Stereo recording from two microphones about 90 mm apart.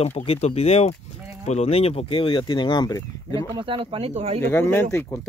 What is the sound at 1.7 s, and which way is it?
Speech, 90° left.